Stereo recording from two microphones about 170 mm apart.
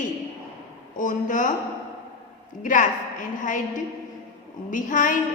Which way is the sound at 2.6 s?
50° left (ahead or behind).